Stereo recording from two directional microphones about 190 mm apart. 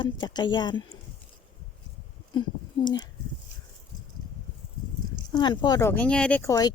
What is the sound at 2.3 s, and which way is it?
Speech, 25° left (ahead or behind).